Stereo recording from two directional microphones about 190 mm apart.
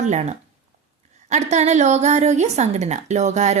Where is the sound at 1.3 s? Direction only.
35° right (ahead or behind).